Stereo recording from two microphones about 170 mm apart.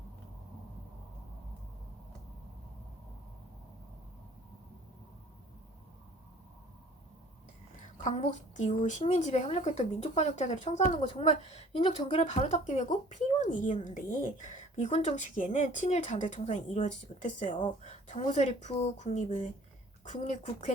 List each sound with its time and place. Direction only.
8.0 s a woman's voice: 45° left (ahead or behind)
12.2 s a woman's voice: 45° left (ahead or behind)